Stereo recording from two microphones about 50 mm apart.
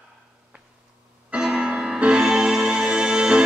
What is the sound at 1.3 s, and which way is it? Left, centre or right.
Music, centre.